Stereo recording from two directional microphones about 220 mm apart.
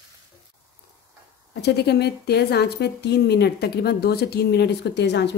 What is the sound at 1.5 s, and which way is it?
A woman's voice, 50° left (ahead or behind).